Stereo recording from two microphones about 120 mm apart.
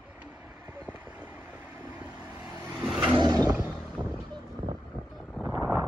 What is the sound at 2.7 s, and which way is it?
Vehicle, 10° right (ahead or behind).